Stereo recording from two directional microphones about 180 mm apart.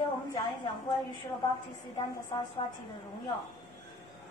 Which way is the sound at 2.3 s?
25° left (ahead or behind).